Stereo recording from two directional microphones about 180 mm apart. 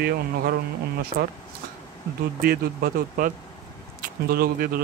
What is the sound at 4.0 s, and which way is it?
Speech, 55° right (ahead or behind).